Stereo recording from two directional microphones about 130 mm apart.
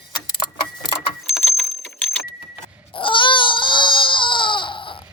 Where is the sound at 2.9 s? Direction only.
40° left (ahead or behind).